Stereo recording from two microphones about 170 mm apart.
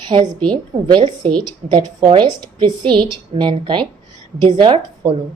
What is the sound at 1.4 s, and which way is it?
A woman's voice, 25° right (ahead or behind).